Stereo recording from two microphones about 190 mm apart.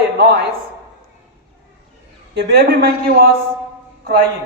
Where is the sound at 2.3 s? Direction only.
55° right (ahead or behind).